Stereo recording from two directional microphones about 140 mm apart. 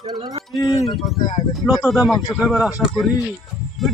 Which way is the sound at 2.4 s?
Centre (ahead or behind).